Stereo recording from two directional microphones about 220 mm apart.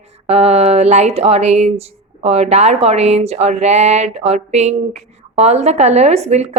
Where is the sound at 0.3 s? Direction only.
30° right (ahead or behind).